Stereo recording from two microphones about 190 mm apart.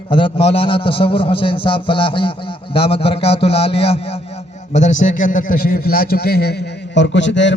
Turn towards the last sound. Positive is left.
turn(degrees=70)  # may be behind; listen again after turning